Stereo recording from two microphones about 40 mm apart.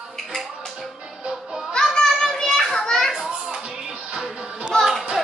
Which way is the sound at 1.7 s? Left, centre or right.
Left.